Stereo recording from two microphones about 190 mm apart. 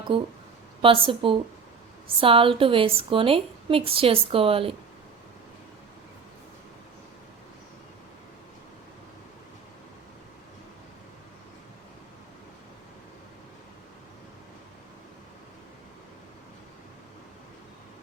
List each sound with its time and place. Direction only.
0.1 s a woman's voice: 25° right (ahead or behind)